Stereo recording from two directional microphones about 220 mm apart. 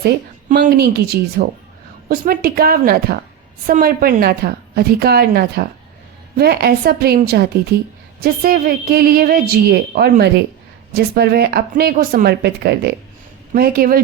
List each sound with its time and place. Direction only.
0.5 s a woman's voice: 45° right (ahead or behind)